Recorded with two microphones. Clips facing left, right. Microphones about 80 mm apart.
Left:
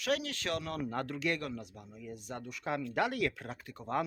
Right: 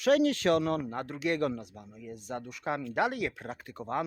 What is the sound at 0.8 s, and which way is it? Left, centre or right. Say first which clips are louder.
Speech: right 2 dB; centre.